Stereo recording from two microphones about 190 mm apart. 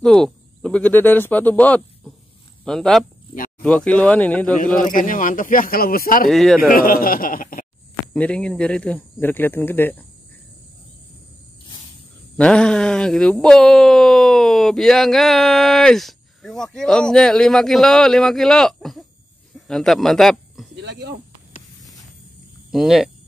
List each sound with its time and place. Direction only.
0.0 s speech: 5° left (ahead or behind)
3.3 s a sound: 45° left (ahead or behind)
3.6 s speech: 5° left (ahead or behind)
4.7 s speech: 45° left (ahead or behind)
6.2 s speech: centre (ahead or behind)
6.7 s speech: 50° left (ahead or behind)
8.1 s speech: 5° left (ahead or behind)
12.4 s speech: 5° left (ahead or behind)
20.7 s speech: 65° right (ahead or behind)
22.7 s speech: centre (ahead or behind)